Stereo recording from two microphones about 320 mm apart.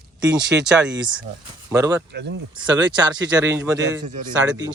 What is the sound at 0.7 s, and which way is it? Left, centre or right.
A man's voice, centre.